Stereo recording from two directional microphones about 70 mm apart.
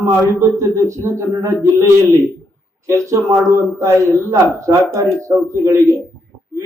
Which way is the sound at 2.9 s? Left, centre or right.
Right.